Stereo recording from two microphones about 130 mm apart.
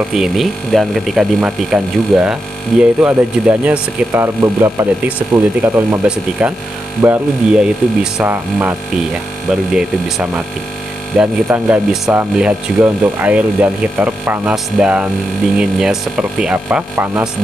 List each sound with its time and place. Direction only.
0.1 s speech: centre (ahead or behind)
4.1 s speech: 20° right (ahead or behind)
7.0 s speech: 20° right (ahead or behind)
9.8 s speech: 5° right (ahead or behind)
16.9 s speech: 20° right (ahead or behind)